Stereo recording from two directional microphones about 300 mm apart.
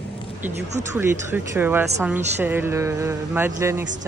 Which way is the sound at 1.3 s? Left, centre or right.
Centre.